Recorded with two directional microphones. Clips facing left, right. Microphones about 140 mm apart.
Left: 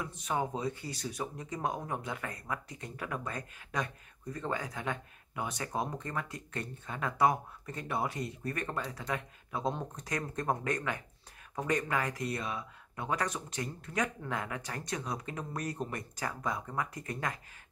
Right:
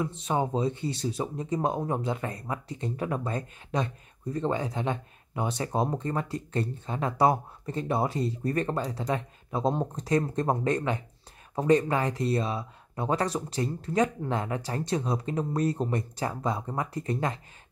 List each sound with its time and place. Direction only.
0.0 s speech: 25° right (ahead or behind)